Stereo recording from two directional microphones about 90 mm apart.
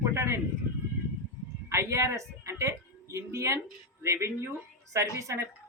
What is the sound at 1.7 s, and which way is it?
A woman's voice, 30° right (ahead or behind).